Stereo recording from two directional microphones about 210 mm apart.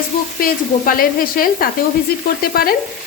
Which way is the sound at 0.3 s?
45° left (ahead or behind).